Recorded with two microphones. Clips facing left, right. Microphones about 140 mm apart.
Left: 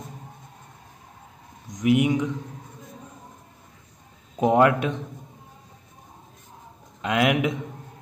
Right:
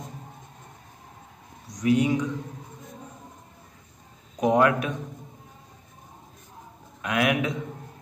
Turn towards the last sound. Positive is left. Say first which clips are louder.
# left 3 dB
turn(degrees=25)  # may be behind; listen again after turning